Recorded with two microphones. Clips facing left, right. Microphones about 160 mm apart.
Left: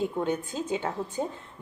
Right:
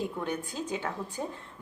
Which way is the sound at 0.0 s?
25° left (ahead or behind).